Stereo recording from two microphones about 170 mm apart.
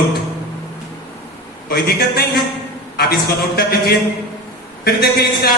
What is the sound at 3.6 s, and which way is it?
Speech, 70° left (ahead or behind).